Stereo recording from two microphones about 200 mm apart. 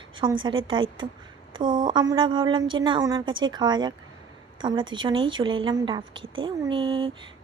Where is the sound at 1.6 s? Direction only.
25° right (ahead or behind).